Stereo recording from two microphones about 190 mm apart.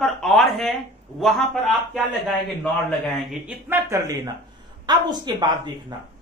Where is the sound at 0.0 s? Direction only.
Centre (ahead or behind).